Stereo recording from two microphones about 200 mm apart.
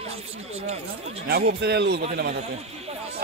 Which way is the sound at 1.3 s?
50° right (ahead or behind).